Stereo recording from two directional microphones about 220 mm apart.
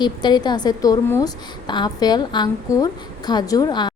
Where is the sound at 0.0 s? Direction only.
20° left (ahead or behind).